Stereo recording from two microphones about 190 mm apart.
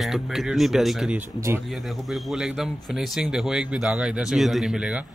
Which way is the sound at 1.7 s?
Centre (ahead or behind).